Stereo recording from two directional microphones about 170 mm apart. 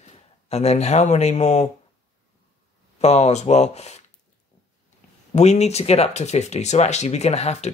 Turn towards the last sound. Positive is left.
turn(degrees=40)  # may be behind; listen again after turning